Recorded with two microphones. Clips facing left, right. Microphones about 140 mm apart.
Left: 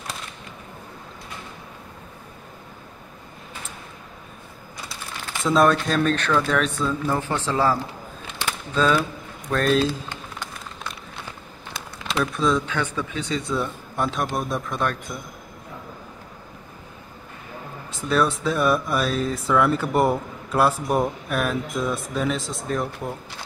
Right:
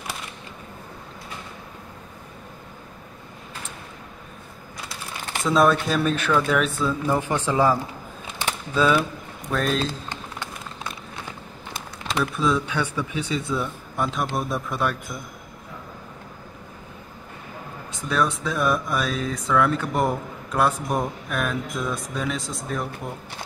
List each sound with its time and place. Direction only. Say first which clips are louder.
5.5 s speech: left 1 dB; centre (ahead or behind)
9.8 s speech: left 5 dB; 10° left (ahead or behind)
12.1 s speech: left 1 dB; 5° right (ahead or behind)
17.9 s speech: left 2 dB; centre (ahead or behind)